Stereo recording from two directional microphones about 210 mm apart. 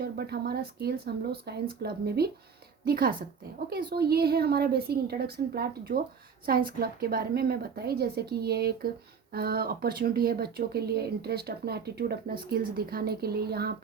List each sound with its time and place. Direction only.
0.0 s speech: 50° right (ahead or behind)